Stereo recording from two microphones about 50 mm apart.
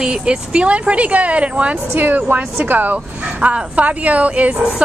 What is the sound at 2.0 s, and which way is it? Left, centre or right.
A woman's voice, right.